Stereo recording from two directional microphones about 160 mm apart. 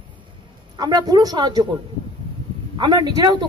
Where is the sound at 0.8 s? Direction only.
25° right (ahead or behind).